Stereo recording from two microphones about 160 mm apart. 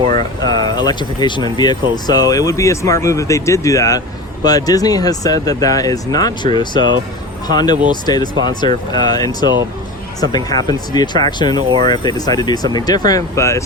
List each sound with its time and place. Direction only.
0.1 s speech: 25° left (ahead or behind)